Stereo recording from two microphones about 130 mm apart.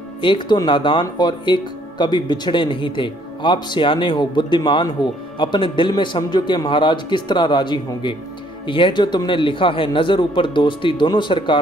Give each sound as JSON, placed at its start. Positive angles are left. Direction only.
{"t": 0.2, "sound": "speech", "side_deg": 35}